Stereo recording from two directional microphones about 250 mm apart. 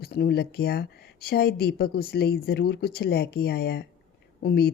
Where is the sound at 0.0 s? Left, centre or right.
Left.